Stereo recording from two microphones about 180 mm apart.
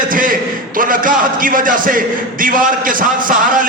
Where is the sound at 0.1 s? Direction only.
50° right (ahead or behind).